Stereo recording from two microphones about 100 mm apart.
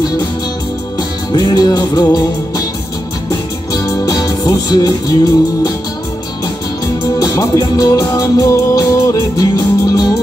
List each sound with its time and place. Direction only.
1.3 s music: 45° left (ahead or behind)
7.2 s music: 35° left (ahead or behind)